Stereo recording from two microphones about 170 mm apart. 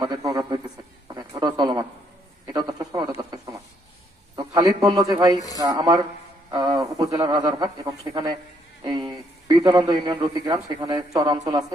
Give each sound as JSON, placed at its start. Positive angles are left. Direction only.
{"t": 0.0, "sound": "a man's voice", "side_deg": -20}
{"t": 1.0, "sound": "a sound", "side_deg": -25}
{"t": 4.4, "sound": "a man's voice", "side_deg": -25}